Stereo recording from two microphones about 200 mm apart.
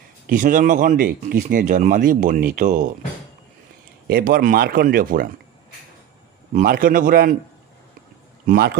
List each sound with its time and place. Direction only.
0.3 s speech: 40° right (ahead or behind)
4.1 s speech: 45° right (ahead or behind)
6.5 s speech: 45° right (ahead or behind)
8.5 s speech: 50° right (ahead or behind)